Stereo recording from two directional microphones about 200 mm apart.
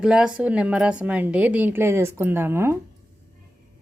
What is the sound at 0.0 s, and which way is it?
A woman's voice, 5° right (ahead or behind).